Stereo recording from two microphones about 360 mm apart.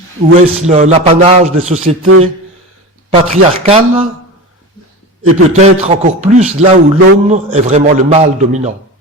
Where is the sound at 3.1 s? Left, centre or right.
Centre.